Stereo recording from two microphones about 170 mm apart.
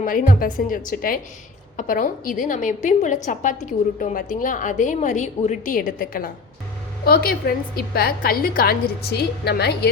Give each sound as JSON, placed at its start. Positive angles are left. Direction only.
{"t": 0.0, "sound": "a woman's voice", "side_deg": 55}